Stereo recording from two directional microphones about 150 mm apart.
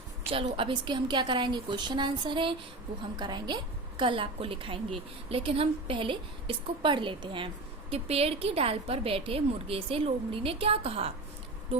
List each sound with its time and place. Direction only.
0.5 s a woman's voice: 35° right (ahead or behind)